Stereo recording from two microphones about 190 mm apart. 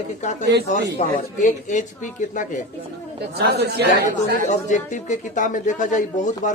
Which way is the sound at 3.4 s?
60° right (ahead or behind).